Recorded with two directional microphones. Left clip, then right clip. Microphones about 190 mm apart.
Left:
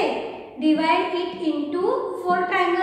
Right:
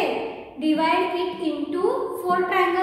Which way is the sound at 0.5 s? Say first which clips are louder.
Left 1 dB; 15° right (ahead or behind).